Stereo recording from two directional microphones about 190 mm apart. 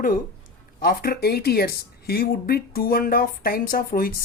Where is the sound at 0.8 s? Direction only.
50° left (ahead or behind).